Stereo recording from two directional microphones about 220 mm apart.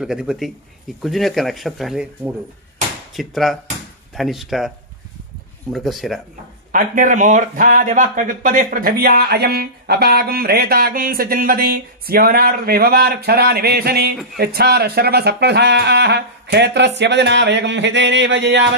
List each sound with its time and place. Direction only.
0.0 s speech: 5° right (ahead or behind)
6.7 s speech: 35° right (ahead or behind); by 18.7 s 55° right (ahead or behind)